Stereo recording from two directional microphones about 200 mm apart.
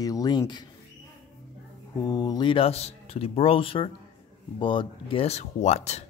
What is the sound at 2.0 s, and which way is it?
Speech, 20° left (ahead or behind).